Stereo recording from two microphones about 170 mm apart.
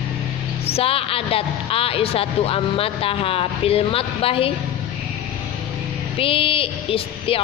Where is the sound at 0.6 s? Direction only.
35° left (ahead or behind).